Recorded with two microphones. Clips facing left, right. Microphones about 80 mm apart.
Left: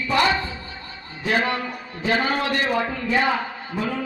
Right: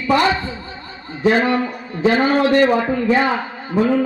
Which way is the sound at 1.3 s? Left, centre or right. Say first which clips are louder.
Right 7 dB; right.